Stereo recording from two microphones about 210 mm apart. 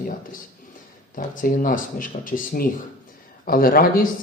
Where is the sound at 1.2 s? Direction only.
40° left (ahead or behind).